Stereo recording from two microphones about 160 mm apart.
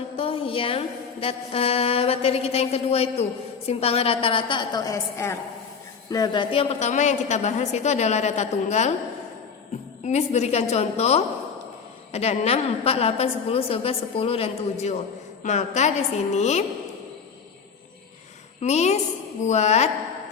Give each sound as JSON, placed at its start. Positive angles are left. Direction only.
{"t": 0.2, "sound": "a woman's voice", "side_deg": 35}
{"t": 10.0, "sound": "a woman's voice", "side_deg": 45}
{"t": 18.6, "sound": "a woman's voice", "side_deg": 45}